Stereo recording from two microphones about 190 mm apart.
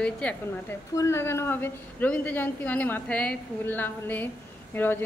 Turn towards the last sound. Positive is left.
turn(degrees=10)  # may be behind; listen again after turning